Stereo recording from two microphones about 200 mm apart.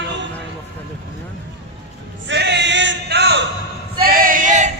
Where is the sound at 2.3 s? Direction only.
60° right (ahead or behind).